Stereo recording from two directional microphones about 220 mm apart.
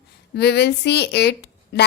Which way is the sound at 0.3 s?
50° left (ahead or behind).